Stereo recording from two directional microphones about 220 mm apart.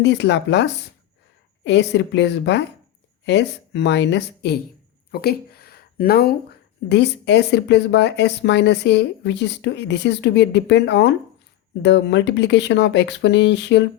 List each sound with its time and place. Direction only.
0.0 s speech: 50° left (ahead or behind)